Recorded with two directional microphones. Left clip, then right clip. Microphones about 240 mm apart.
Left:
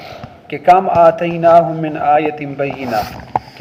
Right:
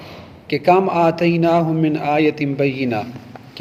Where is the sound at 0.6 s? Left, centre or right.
Right.